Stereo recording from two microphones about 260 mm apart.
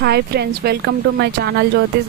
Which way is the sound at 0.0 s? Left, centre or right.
Right.